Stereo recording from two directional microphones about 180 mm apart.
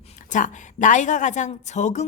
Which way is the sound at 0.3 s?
45° left (ahead or behind).